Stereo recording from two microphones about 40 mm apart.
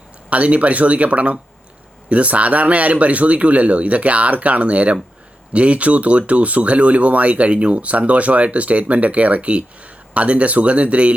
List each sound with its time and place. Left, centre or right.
0.3 s a man's voice: right